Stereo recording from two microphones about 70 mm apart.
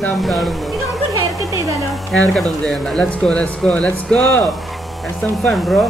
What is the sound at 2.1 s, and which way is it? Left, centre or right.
Speech, centre.